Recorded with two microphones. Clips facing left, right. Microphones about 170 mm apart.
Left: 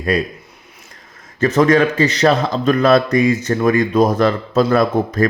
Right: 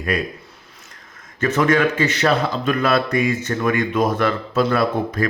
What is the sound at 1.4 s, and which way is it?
Speech, 40° left (ahead or behind).